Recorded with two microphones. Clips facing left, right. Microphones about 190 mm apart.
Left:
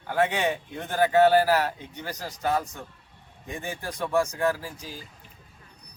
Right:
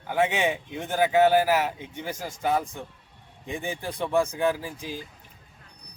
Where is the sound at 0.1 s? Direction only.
10° right (ahead or behind).